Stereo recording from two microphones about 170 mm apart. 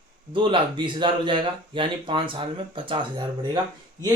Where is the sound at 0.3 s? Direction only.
30° right (ahead or behind).